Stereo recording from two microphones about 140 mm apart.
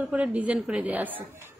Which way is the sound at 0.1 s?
10° right (ahead or behind).